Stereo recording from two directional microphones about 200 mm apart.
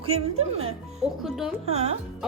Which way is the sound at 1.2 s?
Centre (ahead or behind).